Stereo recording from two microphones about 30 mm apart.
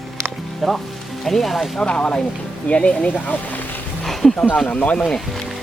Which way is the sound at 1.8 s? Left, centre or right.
Left.